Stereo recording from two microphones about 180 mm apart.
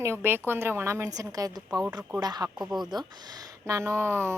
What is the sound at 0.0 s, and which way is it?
A woman's voice, 15° right (ahead or behind).